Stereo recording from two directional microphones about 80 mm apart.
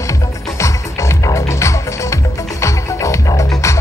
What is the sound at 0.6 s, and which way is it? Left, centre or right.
Music, left.